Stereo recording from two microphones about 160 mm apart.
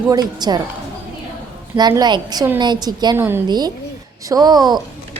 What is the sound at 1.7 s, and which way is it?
A woman's voice, 25° right (ahead or behind).